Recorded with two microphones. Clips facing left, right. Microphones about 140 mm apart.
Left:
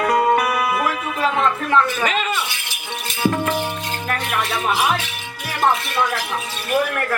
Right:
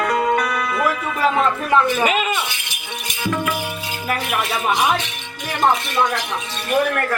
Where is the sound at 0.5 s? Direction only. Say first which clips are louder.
Left 3 dB; 20° left (ahead or behind).